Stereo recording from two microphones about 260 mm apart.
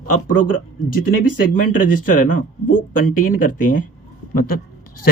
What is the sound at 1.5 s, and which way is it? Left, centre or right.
A man's voice, left.